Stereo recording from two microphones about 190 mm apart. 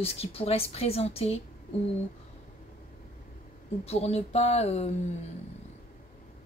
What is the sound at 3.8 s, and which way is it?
A woman's voice, 35° left (ahead or behind).